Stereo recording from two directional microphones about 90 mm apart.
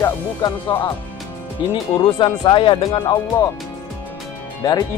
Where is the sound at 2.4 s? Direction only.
70° left (ahead or behind).